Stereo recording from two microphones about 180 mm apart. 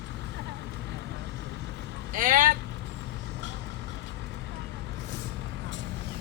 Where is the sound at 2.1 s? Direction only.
45° right (ahead or behind).